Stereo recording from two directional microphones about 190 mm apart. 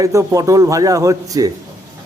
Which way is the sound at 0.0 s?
15° right (ahead or behind).